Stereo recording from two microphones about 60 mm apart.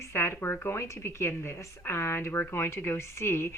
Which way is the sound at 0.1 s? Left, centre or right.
Left.